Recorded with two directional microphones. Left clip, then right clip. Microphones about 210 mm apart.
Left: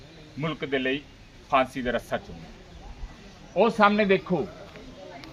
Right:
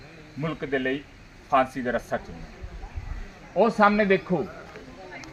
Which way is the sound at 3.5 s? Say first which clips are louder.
Right 1 dB; 10° right (ahead or behind).